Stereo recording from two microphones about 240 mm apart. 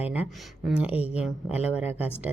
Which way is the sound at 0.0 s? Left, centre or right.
Centre.